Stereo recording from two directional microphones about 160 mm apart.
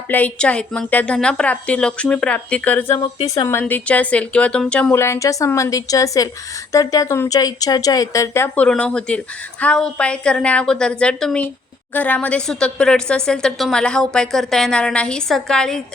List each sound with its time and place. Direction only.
0.1 s a woman's voice: 10° left (ahead or behind)
3.6 s a woman's voice: 10° left (ahead or behind)